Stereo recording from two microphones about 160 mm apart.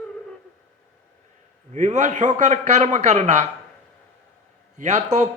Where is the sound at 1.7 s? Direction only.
50° right (ahead or behind).